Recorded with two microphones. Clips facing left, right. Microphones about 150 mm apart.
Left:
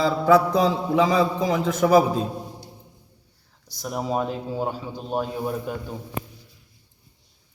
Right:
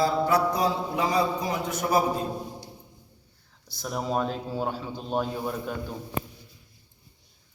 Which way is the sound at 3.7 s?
10° left (ahead or behind).